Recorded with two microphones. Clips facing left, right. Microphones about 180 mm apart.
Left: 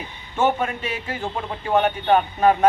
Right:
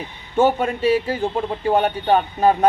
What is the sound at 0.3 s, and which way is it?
Speech, 35° right (ahead or behind).